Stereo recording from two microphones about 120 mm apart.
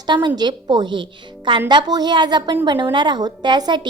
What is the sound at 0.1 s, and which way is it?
A woman's voice, 40° right (ahead or behind).